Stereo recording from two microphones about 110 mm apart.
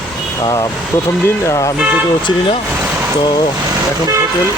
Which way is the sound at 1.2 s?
25° left (ahead or behind).